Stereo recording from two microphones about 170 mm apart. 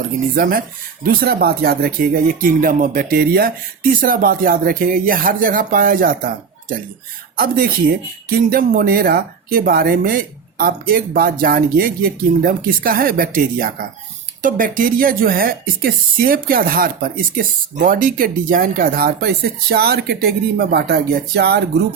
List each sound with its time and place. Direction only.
1.0 s speech: 60° right (ahead or behind)